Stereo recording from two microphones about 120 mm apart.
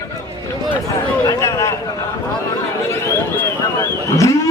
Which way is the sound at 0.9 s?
30° left (ahead or behind).